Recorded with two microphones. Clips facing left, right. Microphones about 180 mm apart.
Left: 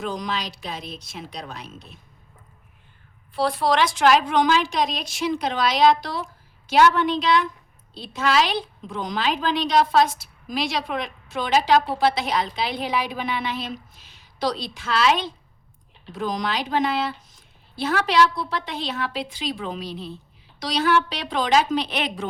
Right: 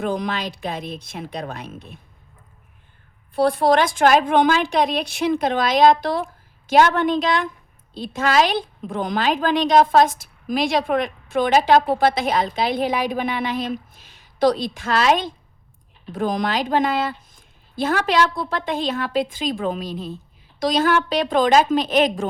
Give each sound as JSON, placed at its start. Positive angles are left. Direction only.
{"t": 0.0, "sound": "a woman's voice", "side_deg": -55}
{"t": 3.3, "sound": "a woman's voice", "side_deg": -55}